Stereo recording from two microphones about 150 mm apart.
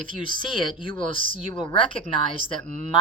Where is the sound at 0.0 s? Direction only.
65° right (ahead or behind).